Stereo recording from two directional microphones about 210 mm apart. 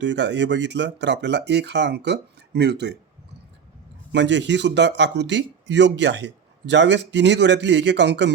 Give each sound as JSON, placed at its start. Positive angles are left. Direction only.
{"t": 0.0, "sound": "speech", "side_deg": -55}
{"t": 4.1, "sound": "speech", "side_deg": -55}